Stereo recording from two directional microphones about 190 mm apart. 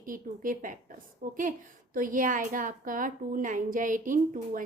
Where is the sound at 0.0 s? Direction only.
45° right (ahead or behind).